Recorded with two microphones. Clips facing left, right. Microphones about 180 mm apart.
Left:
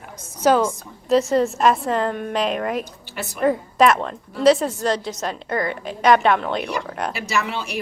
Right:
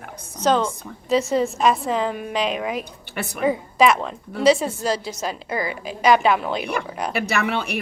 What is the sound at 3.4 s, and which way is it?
A woman's voice, centre (ahead or behind).